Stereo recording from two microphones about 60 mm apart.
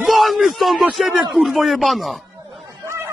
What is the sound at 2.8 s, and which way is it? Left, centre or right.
Chatter, right.